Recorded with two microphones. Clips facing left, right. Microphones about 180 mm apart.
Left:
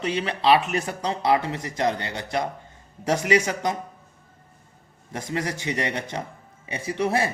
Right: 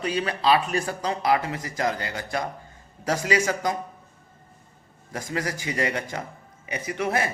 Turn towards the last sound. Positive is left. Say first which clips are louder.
# left 2 dB
turn(degrees=30)  # may be behind; listen again after turning